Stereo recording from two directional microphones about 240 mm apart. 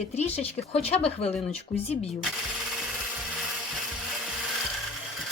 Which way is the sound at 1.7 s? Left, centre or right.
Left.